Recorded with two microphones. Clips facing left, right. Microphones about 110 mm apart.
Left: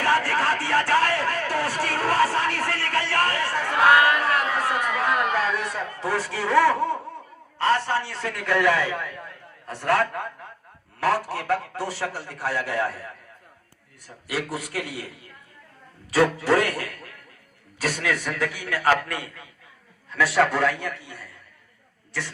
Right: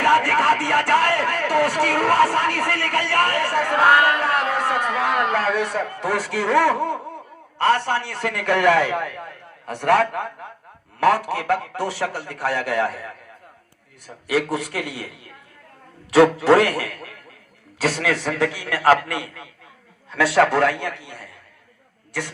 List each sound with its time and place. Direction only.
0.0 s a sound: 65° right (ahead or behind)
7.6 s a man's voice: 65° right (ahead or behind)
14.3 s a man's voice: 70° right (ahead or behind)
16.1 s a man's voice: 75° right (ahead or behind)